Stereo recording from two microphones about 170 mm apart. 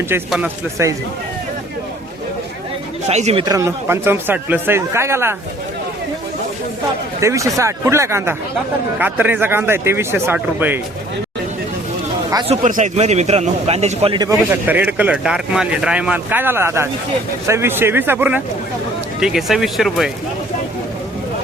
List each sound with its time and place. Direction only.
0.3 s speech: 10° right (ahead or behind)
3.1 s a man's voice: 40° right (ahead or behind)
3.4 s speech: 20° right (ahead or behind)
7.2 s speech: 15° right (ahead or behind)
12.5 s a man's voice: 45° right (ahead or behind)
14.2 s speech: 15° right (ahead or behind)